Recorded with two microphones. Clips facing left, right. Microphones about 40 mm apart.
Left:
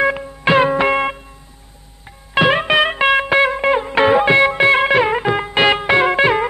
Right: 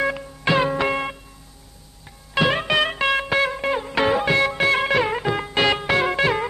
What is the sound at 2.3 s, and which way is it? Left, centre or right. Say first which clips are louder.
Music: left 6 dB; left.